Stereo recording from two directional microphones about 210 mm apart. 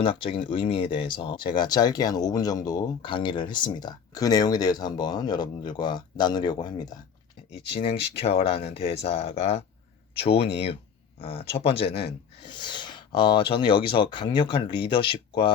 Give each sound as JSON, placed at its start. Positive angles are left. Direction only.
{"t": 0.0, "sound": "speech", "side_deg": 25}